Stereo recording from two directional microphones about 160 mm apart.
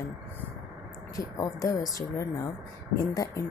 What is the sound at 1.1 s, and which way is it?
Speech, 20° left (ahead or behind).